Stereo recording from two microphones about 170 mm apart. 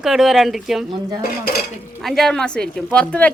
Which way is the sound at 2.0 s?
Centre (ahead or behind).